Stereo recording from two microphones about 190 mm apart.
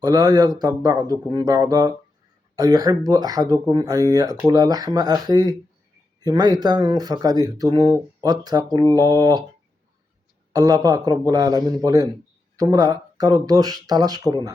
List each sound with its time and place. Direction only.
0.0 s speech: 20° right (ahead or behind)
10.5 s speech: 20° right (ahead or behind)